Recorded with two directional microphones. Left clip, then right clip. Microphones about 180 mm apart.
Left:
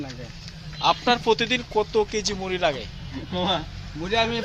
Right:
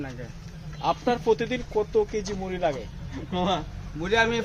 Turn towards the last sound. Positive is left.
turn(degrees=-10)  # may be behind; listen again after turning